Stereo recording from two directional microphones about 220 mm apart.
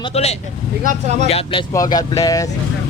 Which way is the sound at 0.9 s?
30° right (ahead or behind).